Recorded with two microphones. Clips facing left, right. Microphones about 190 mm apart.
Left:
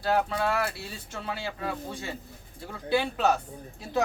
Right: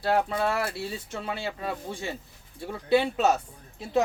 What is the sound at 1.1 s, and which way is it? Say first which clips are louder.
Speech: left 2 dB; 20° right (ahead or behind).